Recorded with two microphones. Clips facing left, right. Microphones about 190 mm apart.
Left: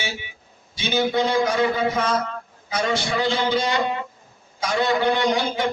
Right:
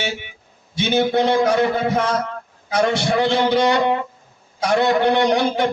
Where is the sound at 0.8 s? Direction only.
60° right (ahead or behind).